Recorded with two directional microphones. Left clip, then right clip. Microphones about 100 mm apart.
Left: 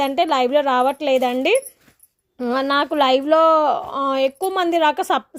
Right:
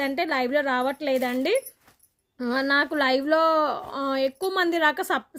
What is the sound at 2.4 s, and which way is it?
A woman's voice, 30° left (ahead or behind).